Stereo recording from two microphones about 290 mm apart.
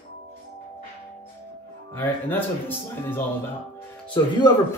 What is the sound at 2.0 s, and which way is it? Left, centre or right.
A man's voice, centre.